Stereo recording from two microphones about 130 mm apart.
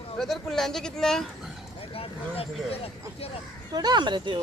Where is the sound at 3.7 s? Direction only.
30° right (ahead or behind).